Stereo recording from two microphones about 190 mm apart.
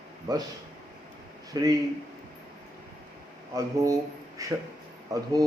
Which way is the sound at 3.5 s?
15° right (ahead or behind).